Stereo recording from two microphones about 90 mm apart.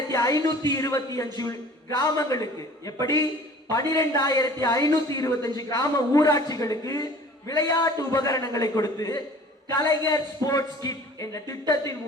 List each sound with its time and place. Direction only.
0.1 s a woman's voice: 40° left (ahead or behind)